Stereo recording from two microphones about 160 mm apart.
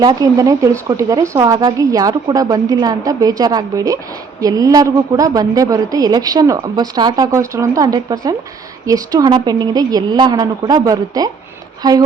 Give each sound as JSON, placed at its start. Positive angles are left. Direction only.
{"t": 0.0, "sound": "a woman's voice", "side_deg": -20}